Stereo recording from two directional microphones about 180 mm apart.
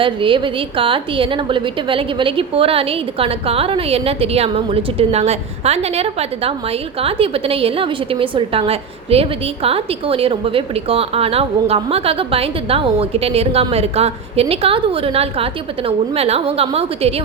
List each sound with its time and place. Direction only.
0.0 s a woman's voice: 30° right (ahead or behind)